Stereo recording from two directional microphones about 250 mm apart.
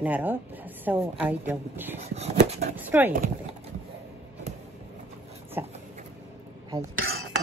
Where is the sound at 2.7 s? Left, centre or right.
Centre.